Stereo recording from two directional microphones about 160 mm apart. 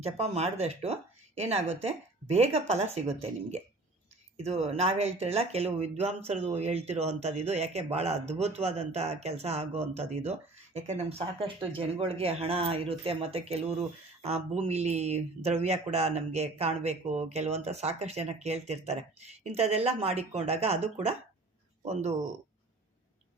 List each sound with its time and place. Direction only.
0.0 s speech: 40° right (ahead or behind)